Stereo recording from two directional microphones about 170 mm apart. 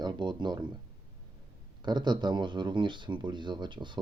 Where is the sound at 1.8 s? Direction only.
25° right (ahead or behind).